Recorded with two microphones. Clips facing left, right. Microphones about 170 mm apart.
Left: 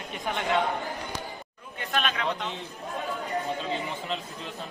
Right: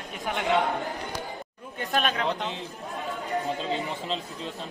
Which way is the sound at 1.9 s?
40° right (ahead or behind).